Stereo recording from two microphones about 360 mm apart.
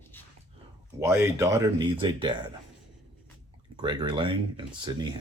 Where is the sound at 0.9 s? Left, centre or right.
Centre.